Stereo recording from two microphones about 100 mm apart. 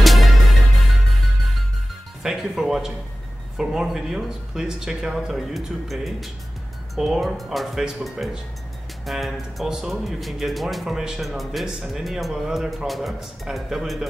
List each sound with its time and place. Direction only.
0.0 s music: centre (ahead or behind)
2.2 s speech: 5° right (ahead or behind)